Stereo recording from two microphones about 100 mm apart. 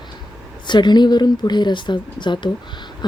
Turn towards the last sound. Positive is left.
turn(degrees=50)  # may be behind; listen again after turning